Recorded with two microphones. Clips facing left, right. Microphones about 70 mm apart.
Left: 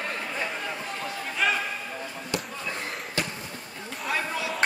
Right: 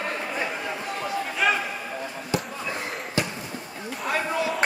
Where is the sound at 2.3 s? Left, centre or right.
Centre.